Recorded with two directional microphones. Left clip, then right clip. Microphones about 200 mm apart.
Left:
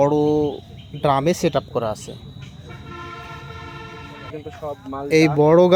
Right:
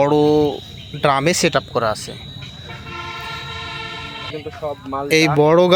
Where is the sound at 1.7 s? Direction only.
20° left (ahead or behind).